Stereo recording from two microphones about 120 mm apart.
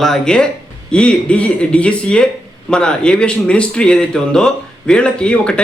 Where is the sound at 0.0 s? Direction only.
5° left (ahead or behind).